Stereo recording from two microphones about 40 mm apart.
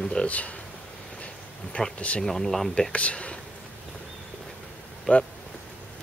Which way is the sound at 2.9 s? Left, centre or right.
Left.